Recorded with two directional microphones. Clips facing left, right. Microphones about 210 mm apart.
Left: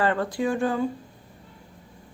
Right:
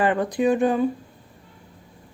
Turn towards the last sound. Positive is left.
turn(degrees=-20)  # may be behind; listen again after turning